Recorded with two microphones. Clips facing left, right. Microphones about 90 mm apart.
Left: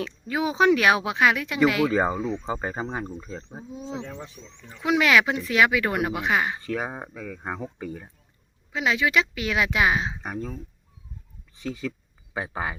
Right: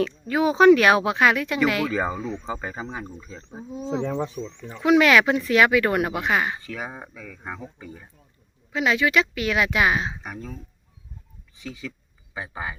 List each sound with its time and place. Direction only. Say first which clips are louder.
0.0 s speech: right 5 dB; 10° left (ahead or behind)
1.9 s a woman's voice: left 2 dB; 30° left (ahead or behind)
2.1 s speech: left 2 dB; 10° left (ahead or behind)
2.5 s a woman's voice: left 2 dB; 30° left (ahead or behind)
3.2 s speech: left 4 dB; 40° left (ahead or behind)
3.7 s speech: right 8 dB; 50° right (ahead or behind)
4.8 s speech: right 4 dB; 10° left (ahead or behind)
6.7 s speech: left 4 dB; 35° left (ahead or behind)
7.6 s speech: left 5 dB; 55° left (ahead or behind)
8.7 s a woman's voice: right 2 dB; 20° left (ahead or behind)
10.2 s speech: left 3 dB; 35° left (ahead or behind)
11.6 s a man's voice: left 5 dB; 45° left (ahead or behind)